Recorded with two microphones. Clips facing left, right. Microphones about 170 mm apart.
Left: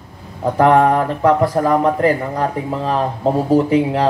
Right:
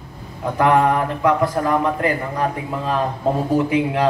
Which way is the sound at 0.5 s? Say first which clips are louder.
Left 3 dB; 35° left (ahead or behind).